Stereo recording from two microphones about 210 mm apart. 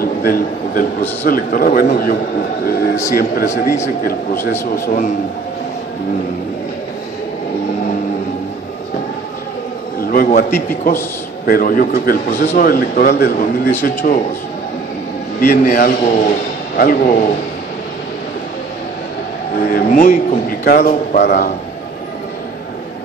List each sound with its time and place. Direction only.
0.0 s a man's voice: 45° left (ahead or behind)
3.2 s a man's voice: 45° left (ahead or behind)
4.8 s a man's voice: 40° left (ahead or behind)
9.9 s a man's voice: 45° left (ahead or behind)
15.4 s a man's voice: 45° left (ahead or behind)
19.7 s a man's voice: 40° left (ahead or behind)